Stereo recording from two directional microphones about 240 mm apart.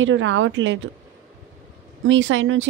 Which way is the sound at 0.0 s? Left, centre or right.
Right.